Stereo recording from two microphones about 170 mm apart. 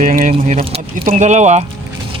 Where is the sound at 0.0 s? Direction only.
50° right (ahead or behind).